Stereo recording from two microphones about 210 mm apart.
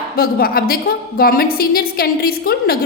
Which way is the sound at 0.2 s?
45° left (ahead or behind).